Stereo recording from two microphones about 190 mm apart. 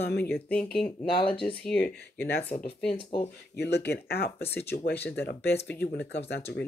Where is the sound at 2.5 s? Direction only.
40° left (ahead or behind).